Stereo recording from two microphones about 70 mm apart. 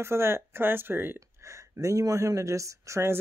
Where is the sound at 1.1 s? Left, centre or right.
Right.